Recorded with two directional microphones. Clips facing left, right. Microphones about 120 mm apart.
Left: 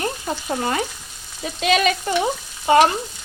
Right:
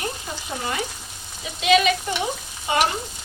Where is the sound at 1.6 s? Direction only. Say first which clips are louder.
Even; 45° left (ahead or behind).